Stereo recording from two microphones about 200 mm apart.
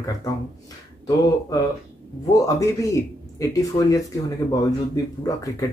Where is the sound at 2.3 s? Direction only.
15° left (ahead or behind).